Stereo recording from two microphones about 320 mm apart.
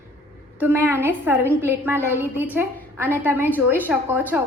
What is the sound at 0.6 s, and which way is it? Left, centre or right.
A woman's voice, centre.